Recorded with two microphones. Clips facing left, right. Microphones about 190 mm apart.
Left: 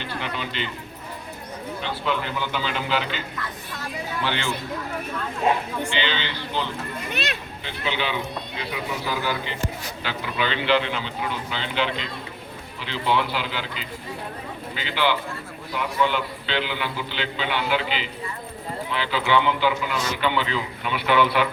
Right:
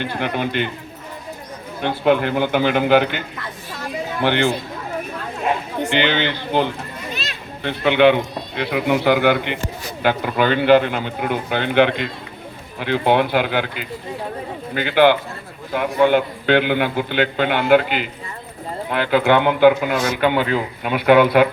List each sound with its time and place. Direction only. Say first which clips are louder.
0.0 s a man's voice: right 8 dB; 55° right (ahead or behind)
1.8 s a man's voice: right 11 dB; 55° right (ahead or behind)
5.8 s a man's voice: right 8 dB; 60° right (ahead or behind)
7.1 s a sound: left 3 dB; 60° left (ahead or behind)
7.6 s a man's voice: right 15 dB; 60° right (ahead or behind)
10.0 s a man's voice: right 10 dB; 55° right (ahead or behind)